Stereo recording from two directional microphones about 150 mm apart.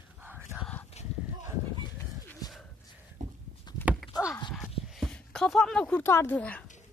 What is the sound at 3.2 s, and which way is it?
Walk, 60° right (ahead or behind).